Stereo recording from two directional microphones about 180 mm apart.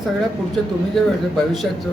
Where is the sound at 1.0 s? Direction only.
Centre (ahead or behind).